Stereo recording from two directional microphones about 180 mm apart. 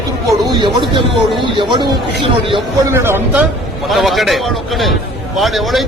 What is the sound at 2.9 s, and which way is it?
Speech, 15° right (ahead or behind).